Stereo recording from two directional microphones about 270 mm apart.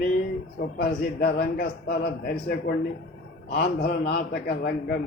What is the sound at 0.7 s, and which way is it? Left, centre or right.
A man's voice, left.